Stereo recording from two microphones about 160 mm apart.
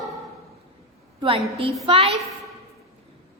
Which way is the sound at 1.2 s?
35° right (ahead or behind).